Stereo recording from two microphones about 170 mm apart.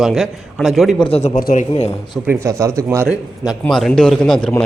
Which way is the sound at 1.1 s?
40° left (ahead or behind).